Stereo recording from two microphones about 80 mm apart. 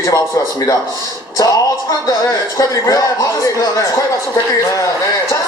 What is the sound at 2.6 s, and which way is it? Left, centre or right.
Speech, left.